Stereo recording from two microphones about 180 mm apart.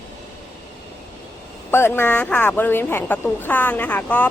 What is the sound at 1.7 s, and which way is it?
Speech, 15° left (ahead or behind).